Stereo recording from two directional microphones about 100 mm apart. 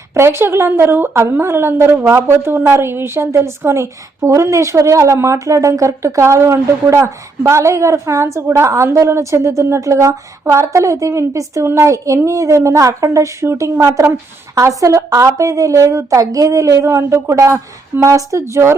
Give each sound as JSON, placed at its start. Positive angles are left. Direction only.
{"t": 0.1, "sound": "a woman's voice", "side_deg": -25}